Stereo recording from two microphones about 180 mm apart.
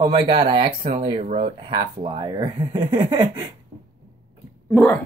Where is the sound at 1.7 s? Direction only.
25° right (ahead or behind).